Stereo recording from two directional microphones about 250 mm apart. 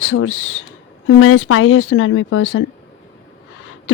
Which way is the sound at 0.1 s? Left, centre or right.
Left.